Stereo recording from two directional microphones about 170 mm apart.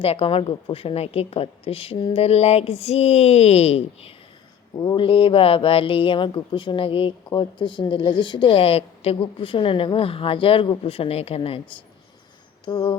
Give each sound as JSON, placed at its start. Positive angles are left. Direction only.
{"t": 0.0, "sound": "speech", "side_deg": 35}
{"t": 4.8, "sound": "speech", "side_deg": 25}
{"t": 12.6, "sound": "a sound", "side_deg": 30}